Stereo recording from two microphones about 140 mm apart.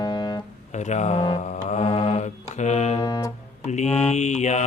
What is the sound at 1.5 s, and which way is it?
Mantra, 55° left (ahead or behind).